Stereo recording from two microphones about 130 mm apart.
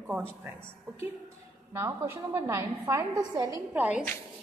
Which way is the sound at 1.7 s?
20° right (ahead or behind).